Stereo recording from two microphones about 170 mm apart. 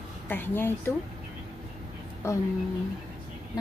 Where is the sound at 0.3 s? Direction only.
10° left (ahead or behind).